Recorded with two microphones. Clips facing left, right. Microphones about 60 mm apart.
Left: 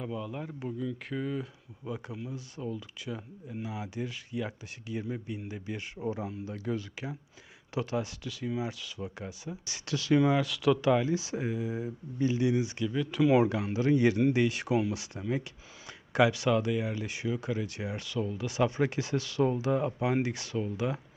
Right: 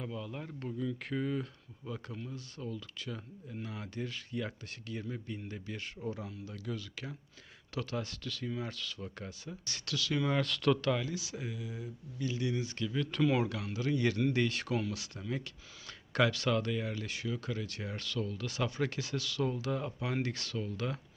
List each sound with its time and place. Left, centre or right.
0.0 s speech: centre; by 10.2 s left
10.2 s speech: centre
10.8 s speech: left
12.9 s speech: centre
13.3 s speech: left